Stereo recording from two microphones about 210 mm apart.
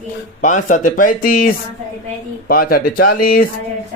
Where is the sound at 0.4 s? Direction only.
40° left (ahead or behind).